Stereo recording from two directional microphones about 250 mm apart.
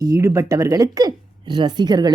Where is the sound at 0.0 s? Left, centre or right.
Centre.